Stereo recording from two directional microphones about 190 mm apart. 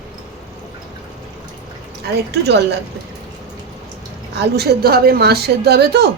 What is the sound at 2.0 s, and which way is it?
Speech, 60° right (ahead or behind).